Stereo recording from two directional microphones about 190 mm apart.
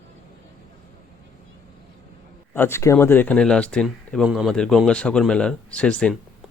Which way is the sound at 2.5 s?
10° left (ahead or behind).